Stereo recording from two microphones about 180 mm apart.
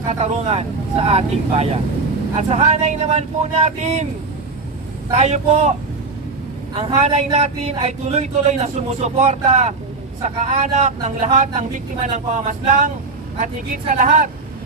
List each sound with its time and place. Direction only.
0.0 s a man's voice: 35° right (ahead or behind)
5.1 s a man's voice: 35° right (ahead or behind)